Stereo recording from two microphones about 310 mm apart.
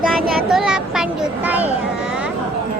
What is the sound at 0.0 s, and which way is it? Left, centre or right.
Child singing, centre.